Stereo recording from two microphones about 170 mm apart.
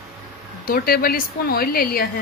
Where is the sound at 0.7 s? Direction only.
60° left (ahead or behind).